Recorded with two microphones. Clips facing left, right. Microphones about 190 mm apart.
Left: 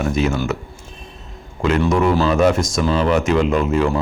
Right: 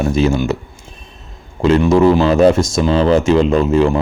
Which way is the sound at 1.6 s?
30° right (ahead or behind).